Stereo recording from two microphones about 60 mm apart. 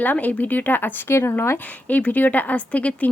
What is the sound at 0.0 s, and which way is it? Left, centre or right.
Speech, left.